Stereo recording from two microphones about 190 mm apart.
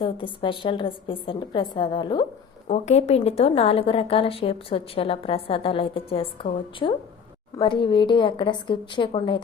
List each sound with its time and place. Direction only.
0.0 s a woman's voice: 25° left (ahead or behind)
2.6 s a woman's voice: 35° left (ahead or behind)